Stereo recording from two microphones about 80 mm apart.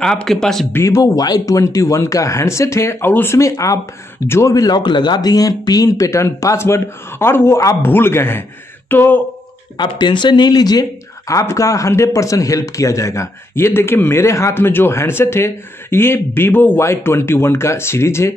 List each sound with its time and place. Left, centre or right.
0.0 s speech: centre
0.8 s speech: left
3.3 s speech: left
4.7 s speech: left
9.8 s speech: left